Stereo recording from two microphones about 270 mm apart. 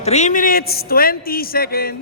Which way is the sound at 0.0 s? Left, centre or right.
Left.